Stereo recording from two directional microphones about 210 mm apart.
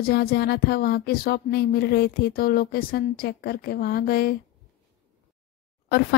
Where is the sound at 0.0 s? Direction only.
50° left (ahead or behind).